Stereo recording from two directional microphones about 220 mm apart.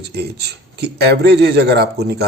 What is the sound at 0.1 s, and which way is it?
Speech, 50° right (ahead or behind).